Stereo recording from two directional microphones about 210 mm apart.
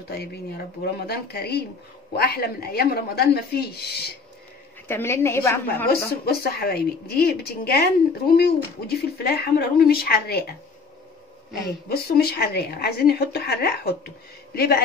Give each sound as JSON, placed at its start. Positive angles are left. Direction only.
{"t": 0.1, "sound": "speech", "side_deg": 50}
{"t": 4.8, "sound": "a woman's voice", "side_deg": 10}
{"t": 6.2, "sound": "speech", "side_deg": 50}
{"t": 11.9, "sound": "speech", "side_deg": 50}